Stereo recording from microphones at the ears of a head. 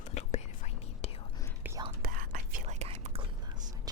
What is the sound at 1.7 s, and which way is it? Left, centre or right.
Whispering, right.